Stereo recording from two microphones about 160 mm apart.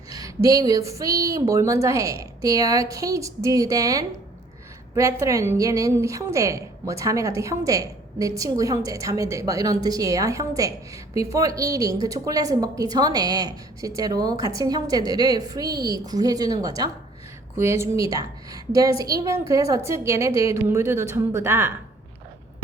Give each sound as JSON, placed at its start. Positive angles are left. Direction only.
{"t": 0.1, "sound": "a woman's voice", "side_deg": -20}